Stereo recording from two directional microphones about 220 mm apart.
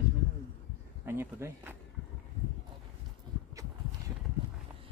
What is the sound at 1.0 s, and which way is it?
Speech, 10° right (ahead or behind).